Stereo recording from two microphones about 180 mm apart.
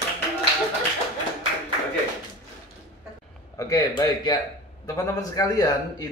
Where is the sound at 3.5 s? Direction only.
20° left (ahead or behind).